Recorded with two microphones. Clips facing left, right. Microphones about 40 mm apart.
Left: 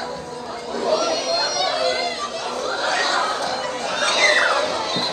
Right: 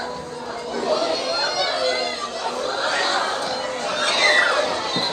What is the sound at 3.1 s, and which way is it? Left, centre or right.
Chatter, left.